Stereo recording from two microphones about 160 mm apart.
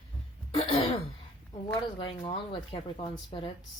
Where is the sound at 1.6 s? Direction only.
25° left (ahead or behind).